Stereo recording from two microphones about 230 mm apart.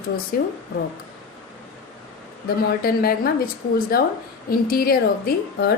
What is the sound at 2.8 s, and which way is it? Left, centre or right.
A woman's voice, left.